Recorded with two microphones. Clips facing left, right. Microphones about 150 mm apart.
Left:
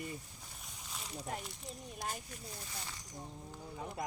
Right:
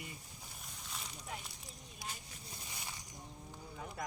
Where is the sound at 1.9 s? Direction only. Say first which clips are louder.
Left 6 dB; 45° left (ahead or behind).